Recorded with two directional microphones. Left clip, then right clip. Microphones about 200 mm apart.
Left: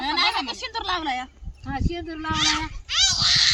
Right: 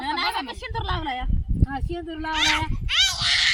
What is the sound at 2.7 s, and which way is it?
Cat, 40° right (ahead or behind).